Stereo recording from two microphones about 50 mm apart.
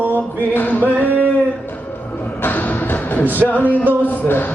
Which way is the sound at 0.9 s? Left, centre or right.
Right.